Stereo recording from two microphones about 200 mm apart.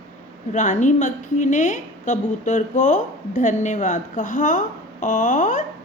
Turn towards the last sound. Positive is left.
turn(degrees=40)  # may be behind; listen again after turning